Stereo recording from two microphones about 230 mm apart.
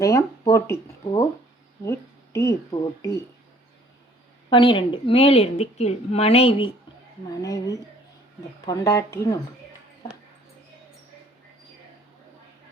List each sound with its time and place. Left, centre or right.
0.0 s speech: centre
4.4 s a woman's voice: left